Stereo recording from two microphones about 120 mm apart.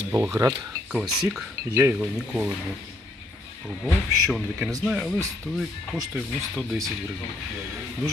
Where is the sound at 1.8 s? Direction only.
15° right (ahead or behind).